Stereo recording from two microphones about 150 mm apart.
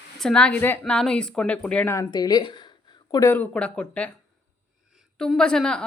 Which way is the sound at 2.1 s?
25° left (ahead or behind).